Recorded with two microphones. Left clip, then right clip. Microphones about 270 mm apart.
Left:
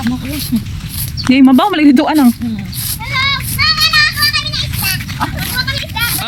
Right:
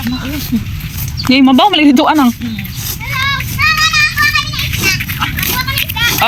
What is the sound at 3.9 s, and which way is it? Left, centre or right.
Children playing, left.